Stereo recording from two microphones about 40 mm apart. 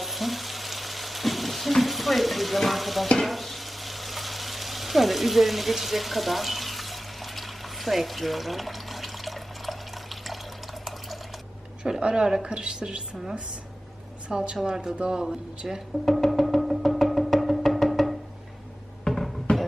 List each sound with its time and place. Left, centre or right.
0.0 s frying: centre
11.8 s speech: right
14.3 s speech: right
16.0 s music: centre